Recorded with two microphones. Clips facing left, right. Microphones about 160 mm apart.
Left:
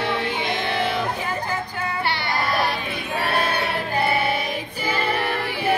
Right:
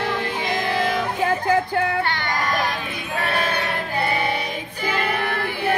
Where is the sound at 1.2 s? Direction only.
75° right (ahead or behind).